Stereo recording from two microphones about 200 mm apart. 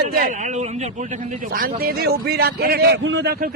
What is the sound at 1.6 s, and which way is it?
A man's voice, 50° right (ahead or behind).